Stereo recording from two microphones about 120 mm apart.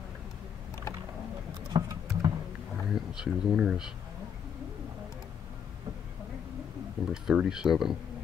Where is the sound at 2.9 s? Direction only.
5° right (ahead or behind).